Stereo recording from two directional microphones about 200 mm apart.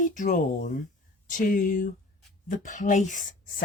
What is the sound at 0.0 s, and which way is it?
Speech, 40° left (ahead or behind).